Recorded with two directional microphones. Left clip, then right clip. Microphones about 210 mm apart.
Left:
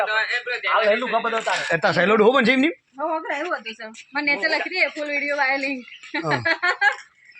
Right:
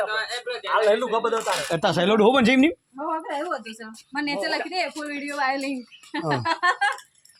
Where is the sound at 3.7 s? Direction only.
70° right (ahead or behind).